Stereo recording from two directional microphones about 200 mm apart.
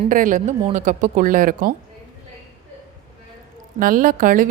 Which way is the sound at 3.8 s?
45° right (ahead or behind).